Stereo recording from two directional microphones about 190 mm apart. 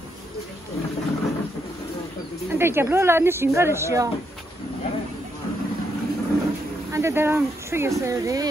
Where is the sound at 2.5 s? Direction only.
10° right (ahead or behind).